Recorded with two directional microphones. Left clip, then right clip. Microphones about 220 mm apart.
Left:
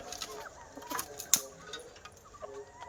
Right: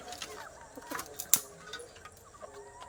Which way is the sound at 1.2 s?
30° right (ahead or behind).